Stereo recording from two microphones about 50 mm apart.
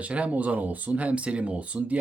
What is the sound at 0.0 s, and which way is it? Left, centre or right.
Speech, right.